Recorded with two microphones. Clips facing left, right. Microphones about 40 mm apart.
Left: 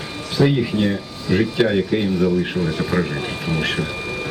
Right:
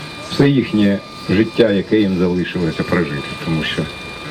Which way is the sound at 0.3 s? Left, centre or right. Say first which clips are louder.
Right 4 dB; centre.